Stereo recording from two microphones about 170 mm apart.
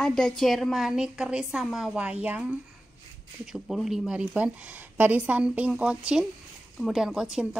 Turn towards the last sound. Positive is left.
turn(degrees=-5)  # may be behind; listen again after turning